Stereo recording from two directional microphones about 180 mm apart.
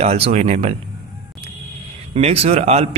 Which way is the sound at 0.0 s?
35° right (ahead or behind).